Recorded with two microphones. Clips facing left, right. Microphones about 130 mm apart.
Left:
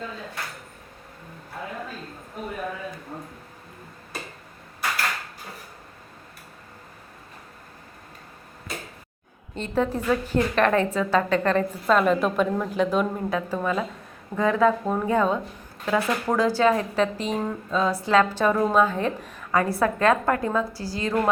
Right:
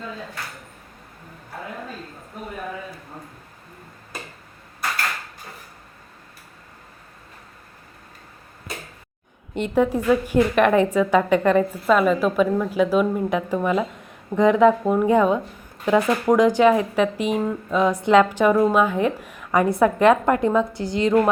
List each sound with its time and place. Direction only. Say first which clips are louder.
9.6 s speech: right 5 dB; 15° right (ahead or behind)
13.3 s speech: right 2 dB; 15° right (ahead or behind)